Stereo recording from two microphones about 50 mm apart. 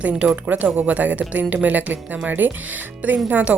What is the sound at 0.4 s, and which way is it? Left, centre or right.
A woman's voice, right.